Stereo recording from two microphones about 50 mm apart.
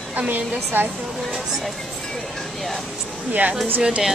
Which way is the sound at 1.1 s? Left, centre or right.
Centre.